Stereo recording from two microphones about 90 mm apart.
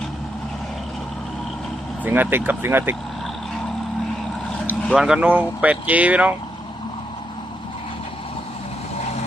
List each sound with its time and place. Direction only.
2.0 s speech: 20° right (ahead or behind)
4.9 s speech: 10° right (ahead or behind)